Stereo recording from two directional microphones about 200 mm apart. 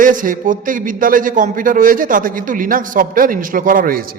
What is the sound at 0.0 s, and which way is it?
A man's voice, 40° right (ahead or behind).